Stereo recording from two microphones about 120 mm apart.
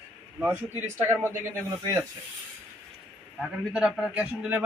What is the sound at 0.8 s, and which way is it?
Speech, 20° right (ahead or behind).